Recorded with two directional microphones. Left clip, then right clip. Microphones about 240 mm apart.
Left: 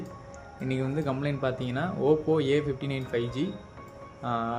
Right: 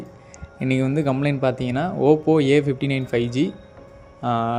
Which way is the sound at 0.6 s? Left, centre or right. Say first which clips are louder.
Right 9 dB; right.